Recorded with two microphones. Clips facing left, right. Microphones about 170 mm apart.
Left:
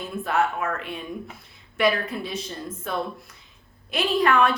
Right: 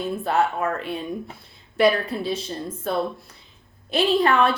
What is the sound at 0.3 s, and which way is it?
A woman's voice, 30° right (ahead or behind).